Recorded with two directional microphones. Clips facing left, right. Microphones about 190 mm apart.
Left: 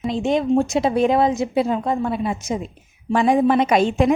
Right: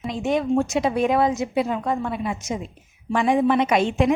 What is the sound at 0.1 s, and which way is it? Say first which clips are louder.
A woman's voice: left 3 dB; 25° left (ahead or behind).